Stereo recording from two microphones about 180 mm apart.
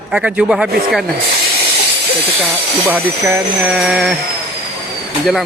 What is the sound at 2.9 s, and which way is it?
Speech, centre (ahead or behind).